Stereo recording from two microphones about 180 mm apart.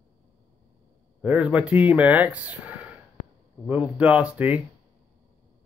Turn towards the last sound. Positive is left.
turn(degrees=-10)  # may be behind; listen again after turning